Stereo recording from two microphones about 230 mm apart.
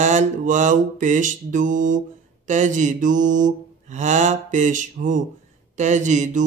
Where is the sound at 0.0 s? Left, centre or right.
Right.